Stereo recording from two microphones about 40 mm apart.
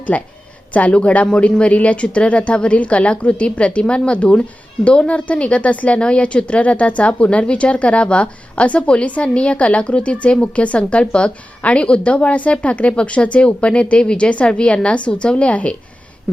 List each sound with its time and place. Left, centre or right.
0.1 s a woman's voice: left